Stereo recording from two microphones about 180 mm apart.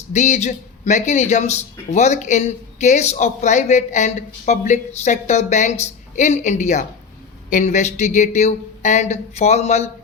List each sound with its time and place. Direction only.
0.1 s speech: 40° left (ahead or behind)